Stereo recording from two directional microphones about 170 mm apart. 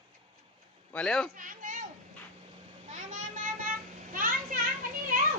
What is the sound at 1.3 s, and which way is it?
Children playing, 55° right (ahead or behind).